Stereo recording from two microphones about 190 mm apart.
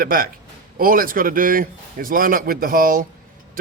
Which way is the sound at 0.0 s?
50° right (ahead or behind).